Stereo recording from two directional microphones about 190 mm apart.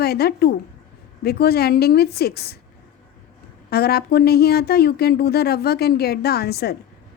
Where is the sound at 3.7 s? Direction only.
55° left (ahead or behind).